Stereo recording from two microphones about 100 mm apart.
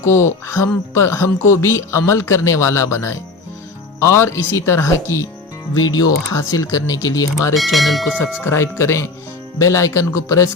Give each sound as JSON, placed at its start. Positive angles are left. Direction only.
{"t": 0.0, "sound": "speech", "side_deg": 30}
{"t": 5.7, "sound": "speech", "side_deg": 40}
{"t": 7.5, "sound": "speech", "side_deg": 0}
{"t": 8.4, "sound": "speech", "side_deg": 25}